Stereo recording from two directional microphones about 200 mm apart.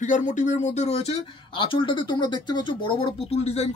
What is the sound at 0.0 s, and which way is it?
Speech, 40° left (ahead or behind).